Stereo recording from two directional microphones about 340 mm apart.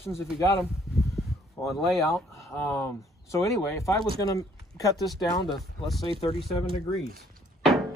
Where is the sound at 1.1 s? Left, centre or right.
Centre.